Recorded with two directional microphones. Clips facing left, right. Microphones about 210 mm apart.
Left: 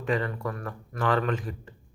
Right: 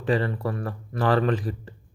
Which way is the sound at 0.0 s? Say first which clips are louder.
Right 4 dB; 35° right (ahead or behind).